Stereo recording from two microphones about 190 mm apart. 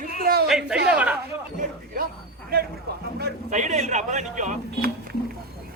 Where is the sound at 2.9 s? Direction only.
55° right (ahead or behind).